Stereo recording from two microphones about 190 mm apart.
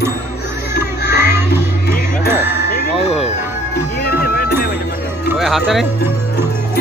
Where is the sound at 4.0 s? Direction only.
55° left (ahead or behind).